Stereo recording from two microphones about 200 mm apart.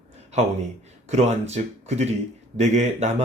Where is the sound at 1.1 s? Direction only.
35° right (ahead or behind).